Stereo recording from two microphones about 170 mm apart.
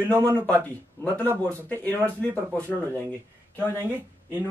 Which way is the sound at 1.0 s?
10° left (ahead or behind).